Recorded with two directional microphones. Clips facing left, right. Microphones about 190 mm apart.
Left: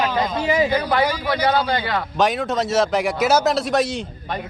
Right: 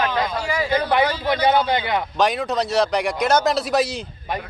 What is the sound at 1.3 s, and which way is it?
Speech, 20° right (ahead or behind).